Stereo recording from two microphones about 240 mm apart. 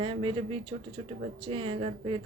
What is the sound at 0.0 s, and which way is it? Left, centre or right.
Speech, right.